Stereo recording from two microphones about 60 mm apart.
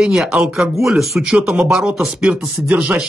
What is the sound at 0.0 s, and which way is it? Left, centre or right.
Speech, centre.